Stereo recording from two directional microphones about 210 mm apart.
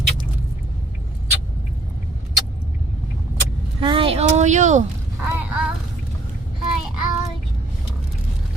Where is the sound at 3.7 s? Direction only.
25° right (ahead or behind).